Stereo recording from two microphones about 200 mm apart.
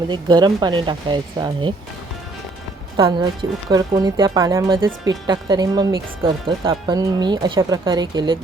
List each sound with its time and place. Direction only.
0.1 s speech: 20° right (ahead or behind)
3.0 s speech: 25° right (ahead or behind)